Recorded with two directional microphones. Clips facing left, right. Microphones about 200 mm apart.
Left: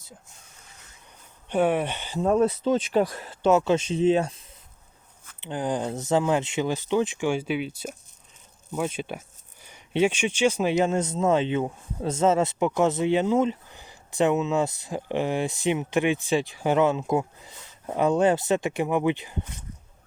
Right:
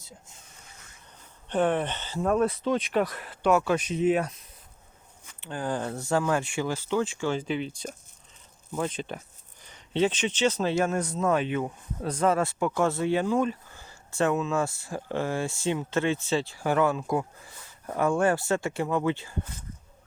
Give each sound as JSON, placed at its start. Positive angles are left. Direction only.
{"t": 1.5, "sound": "speech", "side_deg": 10}
{"t": 2.2, "sound": "speech", "side_deg": 25}